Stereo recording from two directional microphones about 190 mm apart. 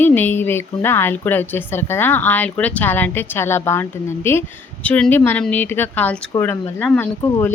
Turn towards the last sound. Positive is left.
turn(degrees=10)  # may be behind; listen again after turning